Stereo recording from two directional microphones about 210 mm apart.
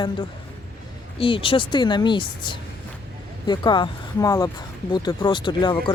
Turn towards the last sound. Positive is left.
turn(degrees=20)  # may be behind; listen again after turning